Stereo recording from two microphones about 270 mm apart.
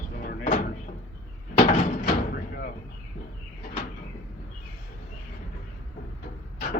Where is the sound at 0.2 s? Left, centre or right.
Left.